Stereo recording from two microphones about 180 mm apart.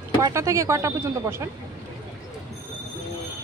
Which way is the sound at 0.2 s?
15° right (ahead or behind).